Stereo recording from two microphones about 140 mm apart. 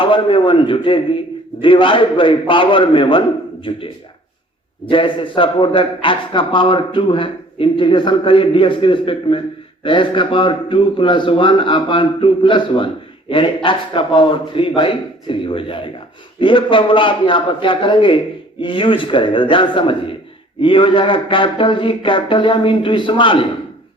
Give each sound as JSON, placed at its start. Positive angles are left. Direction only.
{"t": 0.0, "sound": "a man's voice", "side_deg": 40}
{"t": 4.9, "sound": "a man's voice", "side_deg": 35}